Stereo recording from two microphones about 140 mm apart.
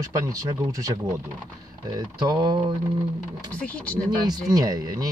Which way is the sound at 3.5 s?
10° left (ahead or behind).